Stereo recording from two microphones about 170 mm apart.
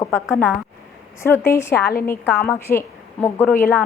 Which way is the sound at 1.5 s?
15° left (ahead or behind).